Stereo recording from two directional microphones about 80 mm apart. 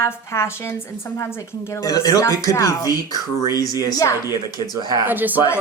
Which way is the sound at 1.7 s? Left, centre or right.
Left.